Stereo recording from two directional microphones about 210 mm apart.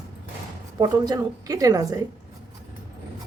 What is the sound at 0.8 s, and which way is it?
A woman's voice, 20° right (ahead or behind).